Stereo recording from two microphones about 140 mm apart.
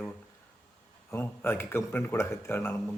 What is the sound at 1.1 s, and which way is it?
A man's voice, 15° left (ahead or behind).